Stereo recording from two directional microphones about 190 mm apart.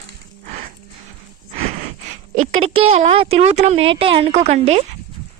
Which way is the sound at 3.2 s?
35° right (ahead or behind).